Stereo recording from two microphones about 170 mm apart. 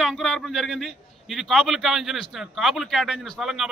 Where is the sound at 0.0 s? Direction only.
Centre (ahead or behind).